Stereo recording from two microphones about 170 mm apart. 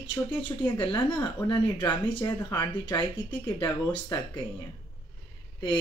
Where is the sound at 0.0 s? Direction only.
25° left (ahead or behind).